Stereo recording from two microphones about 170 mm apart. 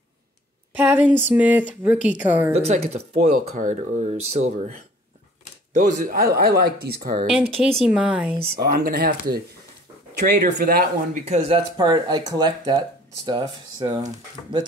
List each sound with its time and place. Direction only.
0.7 s speech: 10° right (ahead or behind)
2.5 s speech: 40° right (ahead or behind)
5.7 s speech: 45° right (ahead or behind); by 7.1 s 65° right (ahead or behind)
7.3 s speech: 5° right (ahead or behind)
8.4 s speech: 65° right (ahead or behind)
11.2 s speech: 35° right (ahead or behind)
11.7 s speech: 25° right (ahead or behind)